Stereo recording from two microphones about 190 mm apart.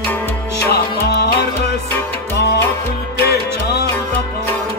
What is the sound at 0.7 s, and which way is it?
Music, 55° left (ahead or behind).